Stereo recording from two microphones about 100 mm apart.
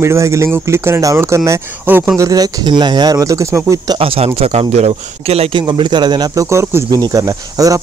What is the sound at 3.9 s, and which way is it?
A man's voice, 70° right (ahead or behind).